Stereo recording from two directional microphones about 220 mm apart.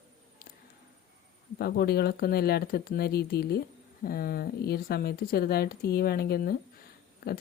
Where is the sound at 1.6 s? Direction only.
45° left (ahead or behind).